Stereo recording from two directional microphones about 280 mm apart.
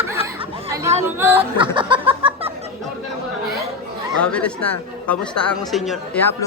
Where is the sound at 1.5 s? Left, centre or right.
Centre.